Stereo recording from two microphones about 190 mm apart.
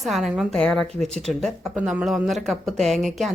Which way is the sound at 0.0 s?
Centre (ahead or behind).